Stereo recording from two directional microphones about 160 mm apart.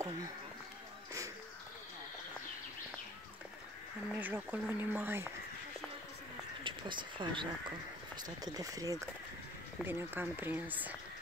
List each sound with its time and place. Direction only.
4.1 s speech: 10° right (ahead or behind)
6.6 s a sound: 30° right (ahead or behind)
8.2 s speech: 25° right (ahead or behind)